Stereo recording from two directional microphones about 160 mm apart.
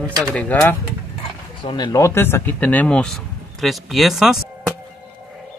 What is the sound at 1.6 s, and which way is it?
Speech, 30° left (ahead or behind).